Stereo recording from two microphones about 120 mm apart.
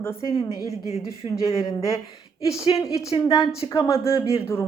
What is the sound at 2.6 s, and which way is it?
Speech, 55° left (ahead or behind).